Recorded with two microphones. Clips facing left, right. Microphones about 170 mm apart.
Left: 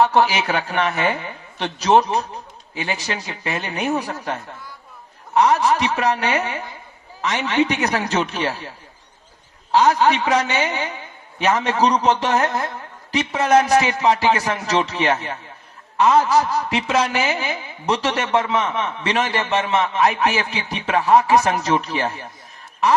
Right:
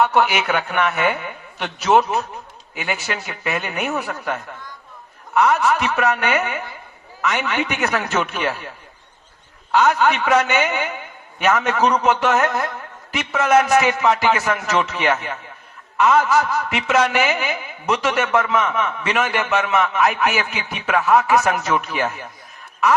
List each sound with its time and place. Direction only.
0.0 s a man's voice: 35° left (ahead or behind)
9.7 s a man's voice: 35° left (ahead or behind)